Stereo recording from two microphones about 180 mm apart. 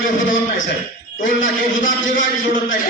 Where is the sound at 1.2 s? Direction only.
45° left (ahead or behind).